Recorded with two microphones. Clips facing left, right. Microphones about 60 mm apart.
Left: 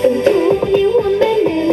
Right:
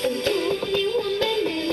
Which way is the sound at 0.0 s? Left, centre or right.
Left.